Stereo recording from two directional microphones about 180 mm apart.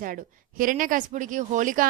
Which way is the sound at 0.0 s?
50° right (ahead or behind).